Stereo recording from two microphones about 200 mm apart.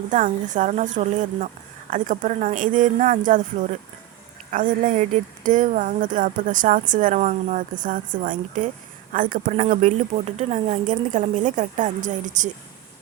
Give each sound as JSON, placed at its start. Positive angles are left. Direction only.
{"t": 0.1, "sound": "speech", "side_deg": -40}
{"t": 4.5, "sound": "speech", "side_deg": -40}